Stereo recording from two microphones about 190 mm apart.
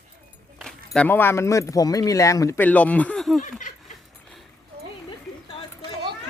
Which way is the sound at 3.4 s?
40° left (ahead or behind).